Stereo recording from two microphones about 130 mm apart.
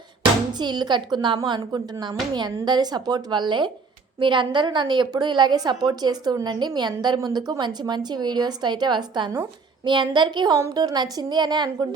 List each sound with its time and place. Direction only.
0.6 s a woman's voice: 35° right (ahead or behind)